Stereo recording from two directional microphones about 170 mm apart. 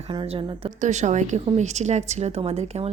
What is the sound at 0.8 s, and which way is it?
A woman's voice, 45° right (ahead or behind).